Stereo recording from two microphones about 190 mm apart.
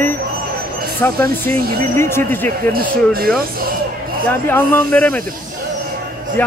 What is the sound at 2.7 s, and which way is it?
Speech, 50° right (ahead or behind).